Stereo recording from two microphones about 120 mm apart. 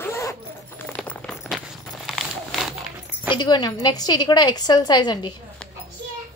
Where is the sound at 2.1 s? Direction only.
Centre (ahead or behind).